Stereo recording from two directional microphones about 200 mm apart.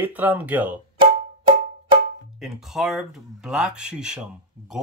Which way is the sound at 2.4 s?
Centre (ahead or behind).